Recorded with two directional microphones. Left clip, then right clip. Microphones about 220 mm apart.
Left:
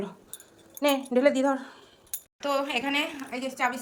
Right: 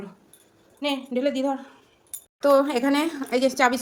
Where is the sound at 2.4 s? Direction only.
80° right.